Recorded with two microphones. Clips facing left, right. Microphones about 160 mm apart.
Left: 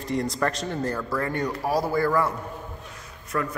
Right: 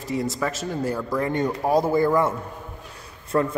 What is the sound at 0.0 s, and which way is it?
A man's voice, centre (ahead or behind).